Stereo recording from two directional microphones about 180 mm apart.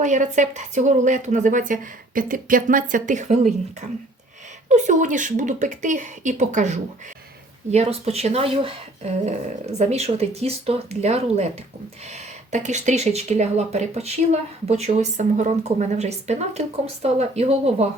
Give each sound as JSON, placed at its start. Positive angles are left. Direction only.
{"t": 0.0, "sound": "a woman's voice", "side_deg": -45}